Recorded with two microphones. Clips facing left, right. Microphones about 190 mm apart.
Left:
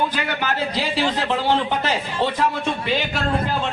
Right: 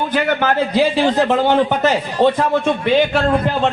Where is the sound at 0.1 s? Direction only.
50° right (ahead or behind).